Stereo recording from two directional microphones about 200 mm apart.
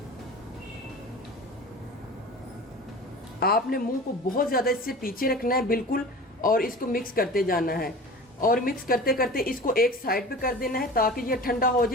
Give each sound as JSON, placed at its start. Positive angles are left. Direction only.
{"t": 3.4, "sound": "a woman's voice", "side_deg": 50}